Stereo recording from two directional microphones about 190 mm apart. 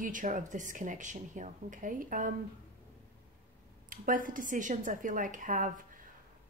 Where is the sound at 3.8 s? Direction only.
45° right (ahead or behind).